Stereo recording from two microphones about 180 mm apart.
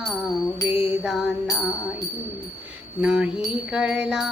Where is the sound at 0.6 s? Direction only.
30° left (ahead or behind).